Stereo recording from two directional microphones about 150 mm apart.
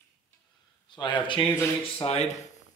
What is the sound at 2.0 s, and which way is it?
Speech, 40° left (ahead or behind).